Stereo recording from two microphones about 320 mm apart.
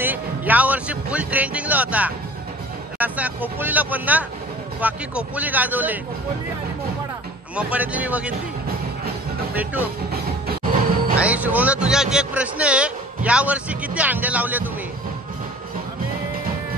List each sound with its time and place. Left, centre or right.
0.0 s a man's voice: centre
7.5 s a man's voice: centre
10.1 s music: right
11.1 s a man's voice: centre